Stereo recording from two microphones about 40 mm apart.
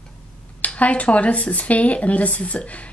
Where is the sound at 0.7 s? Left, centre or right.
Left.